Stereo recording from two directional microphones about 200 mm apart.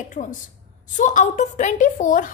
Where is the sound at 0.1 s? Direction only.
40° left (ahead or behind).